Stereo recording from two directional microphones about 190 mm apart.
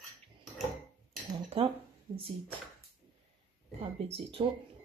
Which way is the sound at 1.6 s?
30° right (ahead or behind).